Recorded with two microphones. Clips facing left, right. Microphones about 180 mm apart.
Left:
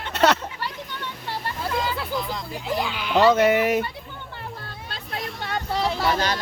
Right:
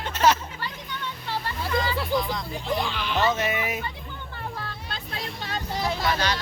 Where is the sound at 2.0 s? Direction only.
5° left (ahead or behind).